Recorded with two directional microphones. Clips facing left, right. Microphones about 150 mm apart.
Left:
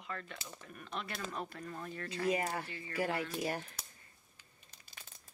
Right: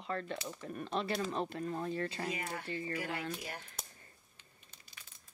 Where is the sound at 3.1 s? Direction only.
35° left (ahead or behind).